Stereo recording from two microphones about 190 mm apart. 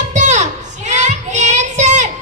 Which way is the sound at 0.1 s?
40° right (ahead or behind).